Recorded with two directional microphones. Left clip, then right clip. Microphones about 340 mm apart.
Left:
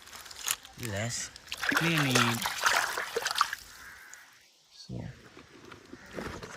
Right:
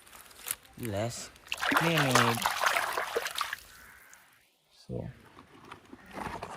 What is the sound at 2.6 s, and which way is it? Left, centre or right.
Trickle, centre.